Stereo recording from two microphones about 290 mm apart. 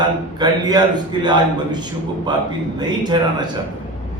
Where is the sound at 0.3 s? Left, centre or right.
Centre.